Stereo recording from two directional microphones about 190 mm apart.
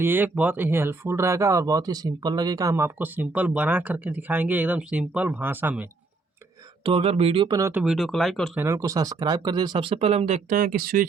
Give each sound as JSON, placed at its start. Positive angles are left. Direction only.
{"t": 0.0, "sound": "speech", "side_deg": -10}
{"t": 6.8, "sound": "speech", "side_deg": -30}
{"t": 7.7, "sound": "speech", "side_deg": -5}
{"t": 8.5, "sound": "speech", "side_deg": -15}